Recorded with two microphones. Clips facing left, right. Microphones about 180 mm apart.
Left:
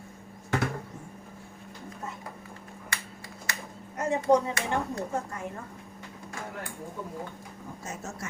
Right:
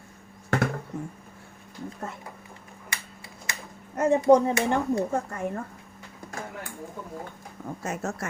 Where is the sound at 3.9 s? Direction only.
55° right (ahead or behind).